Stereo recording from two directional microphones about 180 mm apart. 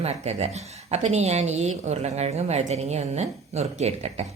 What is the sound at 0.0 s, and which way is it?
Speech, 35° right (ahead or behind).